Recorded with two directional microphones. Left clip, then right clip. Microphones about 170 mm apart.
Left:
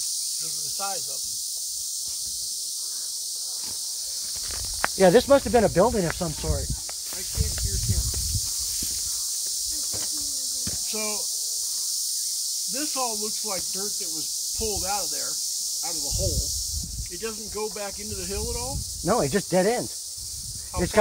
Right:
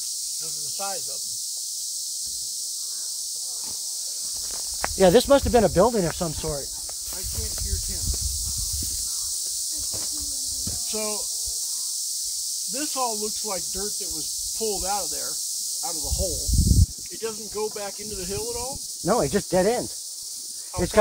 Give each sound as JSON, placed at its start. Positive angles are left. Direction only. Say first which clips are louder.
{"t": 4.8, "sound": "cricket", "louder": "even", "side_deg": -10}
{"t": 10.9, "sound": "speech", "louder": "right 2 dB", "side_deg": -30}
{"t": 12.7, "sound": "cricket", "louder": "right 3 dB", "side_deg": -30}
{"t": 14.6, "sound": "speech", "louder": "right 2 dB", "side_deg": -30}
{"t": 19.0, "sound": "cricket", "louder": "right 1 dB", "side_deg": -15}